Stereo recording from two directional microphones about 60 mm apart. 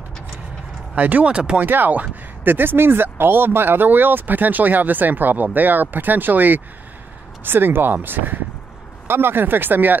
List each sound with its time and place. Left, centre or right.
0.9 s speech: right
1.6 s speech: right